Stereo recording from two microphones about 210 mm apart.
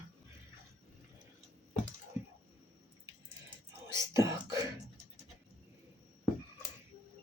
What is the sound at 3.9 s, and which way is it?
Beatboxing, 15° right (ahead or behind).